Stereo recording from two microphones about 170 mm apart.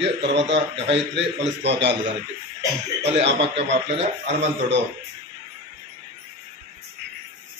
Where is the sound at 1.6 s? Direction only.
90° right.